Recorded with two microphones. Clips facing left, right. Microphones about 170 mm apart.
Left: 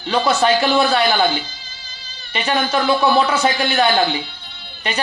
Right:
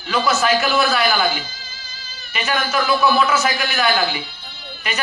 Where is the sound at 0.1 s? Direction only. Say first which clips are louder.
Left 2 dB; 30° left (ahead or behind).